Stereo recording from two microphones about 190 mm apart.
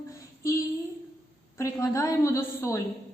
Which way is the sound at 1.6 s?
15° left (ahead or behind).